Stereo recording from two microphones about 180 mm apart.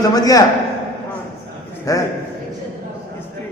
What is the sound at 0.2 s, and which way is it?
Speech, 20° left (ahead or behind).